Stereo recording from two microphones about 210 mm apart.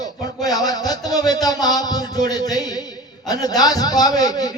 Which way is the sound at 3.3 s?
20° left (ahead or behind).